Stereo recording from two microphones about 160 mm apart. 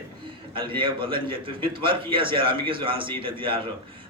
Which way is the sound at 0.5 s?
30° right (ahead or behind).